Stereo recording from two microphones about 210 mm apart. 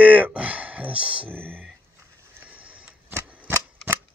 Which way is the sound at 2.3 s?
5° right (ahead or behind).